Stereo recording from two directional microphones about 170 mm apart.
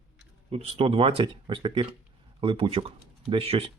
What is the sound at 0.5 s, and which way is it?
Speech, 35° right (ahead or behind).